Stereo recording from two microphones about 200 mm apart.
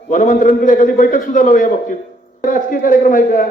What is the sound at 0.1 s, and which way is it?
A man's voice, 40° left (ahead or behind).